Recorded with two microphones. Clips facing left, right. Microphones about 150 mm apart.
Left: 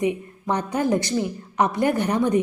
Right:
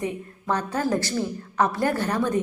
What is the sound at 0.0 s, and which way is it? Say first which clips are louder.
A woman's voice: left 6 dB; 20° left (ahead or behind).